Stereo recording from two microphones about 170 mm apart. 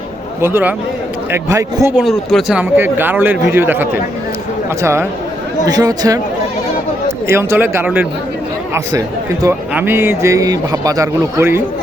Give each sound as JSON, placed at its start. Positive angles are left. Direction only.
{"t": 0.4, "sound": "speech", "side_deg": -15}
{"t": 2.0, "sound": "speech", "side_deg": 0}
{"t": 7.3, "sound": "speech", "side_deg": -15}